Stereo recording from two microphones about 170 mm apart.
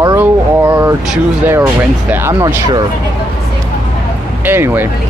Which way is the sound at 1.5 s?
15° right (ahead or behind).